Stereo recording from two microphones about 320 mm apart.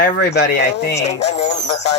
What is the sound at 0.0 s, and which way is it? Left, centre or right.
Speech, left.